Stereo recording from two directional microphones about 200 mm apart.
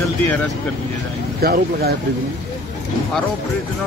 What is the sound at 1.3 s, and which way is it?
Speech, 50° right (ahead or behind).